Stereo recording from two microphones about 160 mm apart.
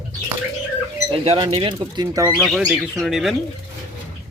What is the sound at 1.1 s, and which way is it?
Speech, 30° right (ahead or behind).